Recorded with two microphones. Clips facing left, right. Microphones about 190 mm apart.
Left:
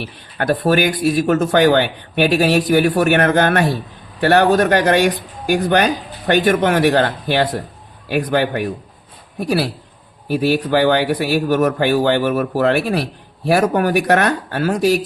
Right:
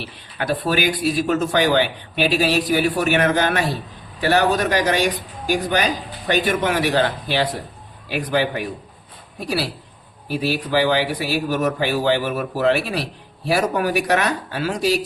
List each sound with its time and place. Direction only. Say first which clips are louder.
0.0 s speech: left 5 dB; 50° left (ahead or behind)